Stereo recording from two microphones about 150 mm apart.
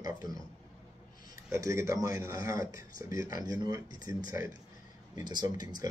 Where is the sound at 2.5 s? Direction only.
65° left (ahead or behind).